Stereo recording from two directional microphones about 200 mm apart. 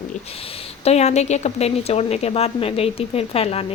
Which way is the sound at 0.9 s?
35° left (ahead or behind).